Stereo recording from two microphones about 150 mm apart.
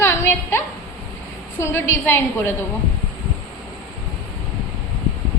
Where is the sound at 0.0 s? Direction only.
15° left (ahead or behind).